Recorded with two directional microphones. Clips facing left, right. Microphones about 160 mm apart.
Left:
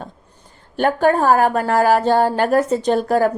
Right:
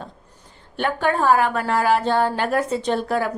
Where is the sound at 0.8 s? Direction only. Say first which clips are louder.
Left 5 dB; 45° left (ahead or behind).